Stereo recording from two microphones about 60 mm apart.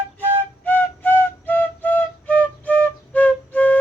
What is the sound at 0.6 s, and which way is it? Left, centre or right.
Flute, left.